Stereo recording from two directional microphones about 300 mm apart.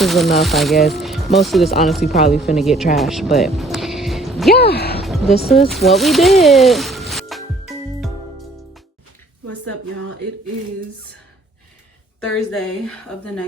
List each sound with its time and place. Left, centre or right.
0.0 s speech: centre
4.5 s speech: left
5.0 s music: centre
5.5 s speech: centre
8.0 s music: centre
12.5 s speech: centre